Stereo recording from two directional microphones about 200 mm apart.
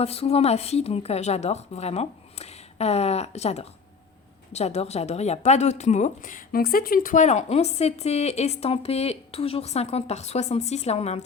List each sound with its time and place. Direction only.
0.0 s a woman's voice: 30° left (ahead or behind)